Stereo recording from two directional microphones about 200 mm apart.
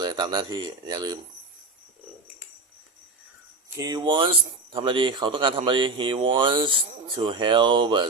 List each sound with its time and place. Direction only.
0.0 s speech: 20° right (ahead or behind)
3.8 s speech: 20° right (ahead or behind)